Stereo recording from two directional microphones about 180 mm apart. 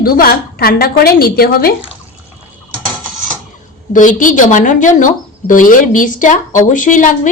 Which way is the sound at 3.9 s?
45° left (ahead or behind).